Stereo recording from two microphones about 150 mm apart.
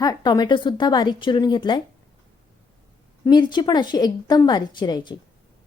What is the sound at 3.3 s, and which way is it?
Speech, 30° left (ahead or behind).